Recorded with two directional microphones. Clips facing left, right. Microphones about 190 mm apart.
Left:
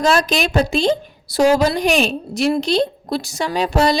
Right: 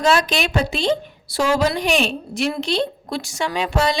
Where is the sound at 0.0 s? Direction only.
40° left (ahead or behind).